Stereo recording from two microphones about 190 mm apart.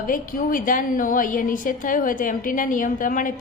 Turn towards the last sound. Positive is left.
turn(degrees=45)  # may be behind; listen again after turning